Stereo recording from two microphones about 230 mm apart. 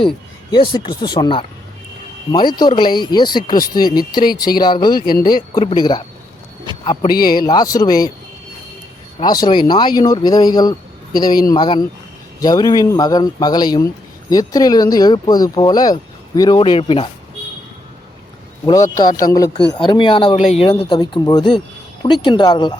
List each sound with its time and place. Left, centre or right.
0.5 s speech: left
9.1 s speech: centre
18.6 s speech: centre